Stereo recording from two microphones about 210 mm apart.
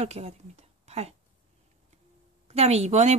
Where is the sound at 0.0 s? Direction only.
30° right (ahead or behind).